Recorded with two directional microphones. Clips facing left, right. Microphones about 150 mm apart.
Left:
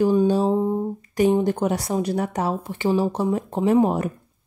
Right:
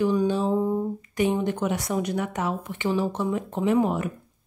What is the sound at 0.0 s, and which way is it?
Music, 35° left (ahead or behind).